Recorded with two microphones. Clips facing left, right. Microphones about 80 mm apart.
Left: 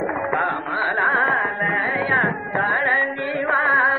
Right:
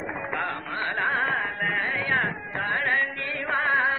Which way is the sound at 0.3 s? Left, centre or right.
Left.